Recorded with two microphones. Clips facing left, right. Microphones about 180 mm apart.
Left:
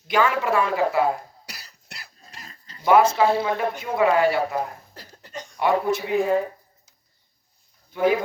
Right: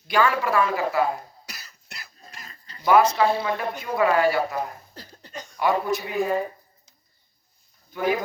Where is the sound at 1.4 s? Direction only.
35° left (ahead or behind).